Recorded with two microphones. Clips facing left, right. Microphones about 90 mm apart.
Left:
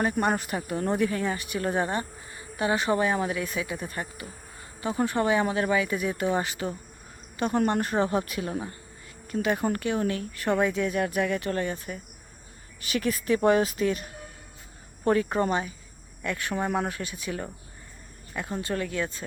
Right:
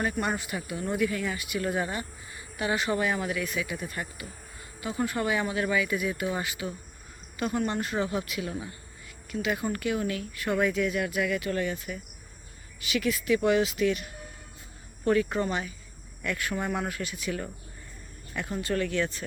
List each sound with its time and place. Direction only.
0.0 s speech: 30° left (ahead or behind)
7.6 s speech: 45° left (ahead or behind); by 19.1 s 15° left (ahead or behind)